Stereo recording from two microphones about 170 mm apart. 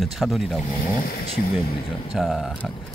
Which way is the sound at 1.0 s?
60° left (ahead or behind).